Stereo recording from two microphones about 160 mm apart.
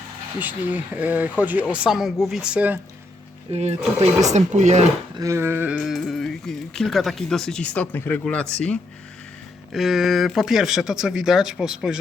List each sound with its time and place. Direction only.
0.3 s speech: 10° right (ahead or behind)
3.5 s speech: 45° right (ahead or behind)
5.1 s speech: 20° right (ahead or behind)
5.7 s speech: centre (ahead or behind)